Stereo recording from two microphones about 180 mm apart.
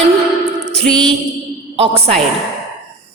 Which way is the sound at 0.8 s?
5° left (ahead or behind).